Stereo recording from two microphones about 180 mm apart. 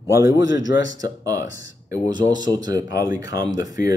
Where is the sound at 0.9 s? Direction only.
20° right (ahead or behind).